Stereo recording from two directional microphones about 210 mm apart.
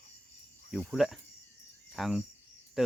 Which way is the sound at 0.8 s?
Centre (ahead or behind).